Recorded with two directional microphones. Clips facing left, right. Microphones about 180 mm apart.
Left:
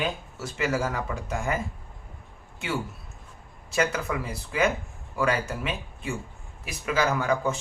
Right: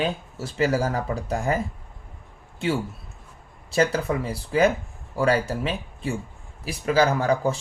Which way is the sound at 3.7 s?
30° right (ahead or behind).